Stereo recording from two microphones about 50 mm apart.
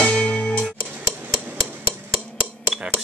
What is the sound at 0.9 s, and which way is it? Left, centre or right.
Hammer, right.